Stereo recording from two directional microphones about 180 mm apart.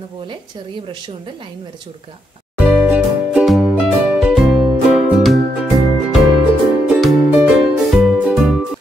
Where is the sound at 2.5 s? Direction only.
5° right (ahead or behind).